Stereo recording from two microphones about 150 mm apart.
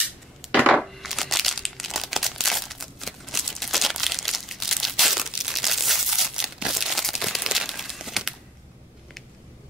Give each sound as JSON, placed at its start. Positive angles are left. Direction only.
{"t": 0.4, "sound": "chopping", "side_deg": -10}
{"t": 0.7, "sound": "crumpling", "side_deg": 0}